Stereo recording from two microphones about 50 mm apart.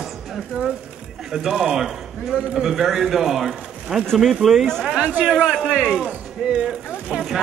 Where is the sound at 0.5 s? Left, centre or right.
Centre.